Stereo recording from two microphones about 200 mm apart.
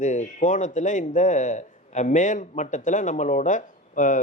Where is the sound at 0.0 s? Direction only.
35° left (ahead or behind).